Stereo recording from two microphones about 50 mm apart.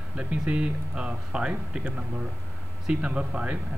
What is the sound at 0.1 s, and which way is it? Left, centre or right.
Speech, right.